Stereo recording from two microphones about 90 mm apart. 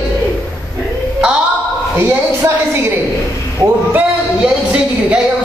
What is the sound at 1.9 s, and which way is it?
Speech, 25° right (ahead or behind).